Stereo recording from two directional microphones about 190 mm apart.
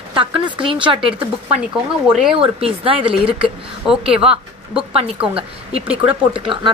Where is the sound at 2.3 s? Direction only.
30° right (ahead or behind).